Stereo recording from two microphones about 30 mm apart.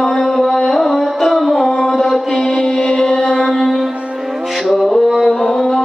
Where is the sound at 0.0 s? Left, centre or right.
Left.